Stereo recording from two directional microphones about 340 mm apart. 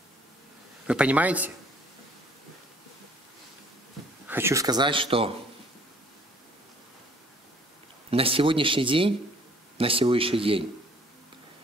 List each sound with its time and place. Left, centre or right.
0.8 s speech: centre
4.3 s speech: centre
8.1 s speech: centre